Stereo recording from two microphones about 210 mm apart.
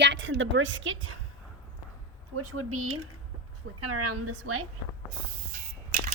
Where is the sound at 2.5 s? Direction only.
90° right.